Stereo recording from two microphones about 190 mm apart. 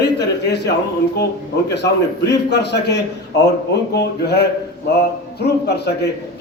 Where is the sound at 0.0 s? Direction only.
65° left (ahead or behind).